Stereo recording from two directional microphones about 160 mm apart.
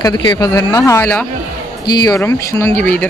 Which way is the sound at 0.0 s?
25° left (ahead or behind).